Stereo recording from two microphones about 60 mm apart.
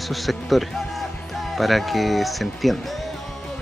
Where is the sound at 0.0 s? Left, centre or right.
Centre.